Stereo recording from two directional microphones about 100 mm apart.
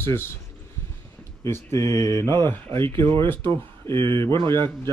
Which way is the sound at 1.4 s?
30° left (ahead or behind).